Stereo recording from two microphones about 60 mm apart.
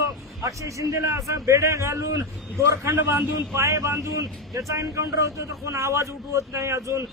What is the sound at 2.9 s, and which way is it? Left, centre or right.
Speech, right.